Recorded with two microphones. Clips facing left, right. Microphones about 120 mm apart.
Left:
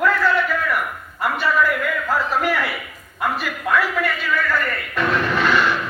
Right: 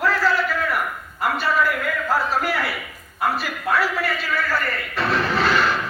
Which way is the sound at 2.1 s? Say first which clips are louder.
Left 1 dB; 35° right (ahead or behind).